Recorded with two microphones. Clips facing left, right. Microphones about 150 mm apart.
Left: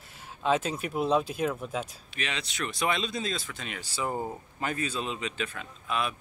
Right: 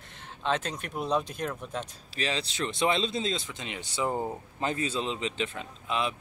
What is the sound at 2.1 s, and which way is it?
Speech, 30° right (ahead or behind).